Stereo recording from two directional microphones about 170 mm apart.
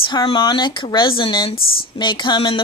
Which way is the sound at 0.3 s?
25° left (ahead or behind).